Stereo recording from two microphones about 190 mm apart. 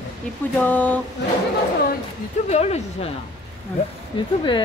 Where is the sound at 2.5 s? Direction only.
35° left (ahead or behind).